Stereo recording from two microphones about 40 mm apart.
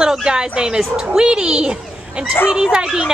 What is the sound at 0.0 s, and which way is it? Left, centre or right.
A woman's voice, centre.